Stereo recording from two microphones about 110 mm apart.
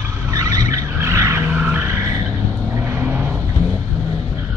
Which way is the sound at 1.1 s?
25° right (ahead or behind).